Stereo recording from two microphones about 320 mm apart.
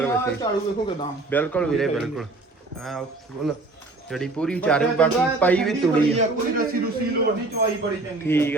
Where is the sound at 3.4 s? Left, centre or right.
Centre.